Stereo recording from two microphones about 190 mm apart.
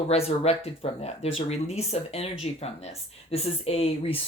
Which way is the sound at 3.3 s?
30° left (ahead or behind).